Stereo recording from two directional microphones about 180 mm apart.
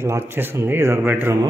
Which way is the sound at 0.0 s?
15° right (ahead or behind).